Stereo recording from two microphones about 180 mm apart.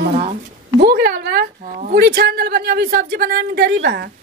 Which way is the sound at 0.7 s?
60° right (ahead or behind).